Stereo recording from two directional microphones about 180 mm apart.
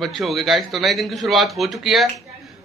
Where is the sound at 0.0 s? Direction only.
Centre (ahead or behind).